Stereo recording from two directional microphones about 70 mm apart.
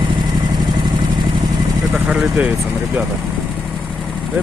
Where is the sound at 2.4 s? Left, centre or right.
Right.